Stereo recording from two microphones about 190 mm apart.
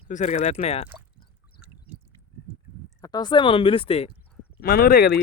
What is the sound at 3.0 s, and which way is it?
Speech, 20° left (ahead or behind).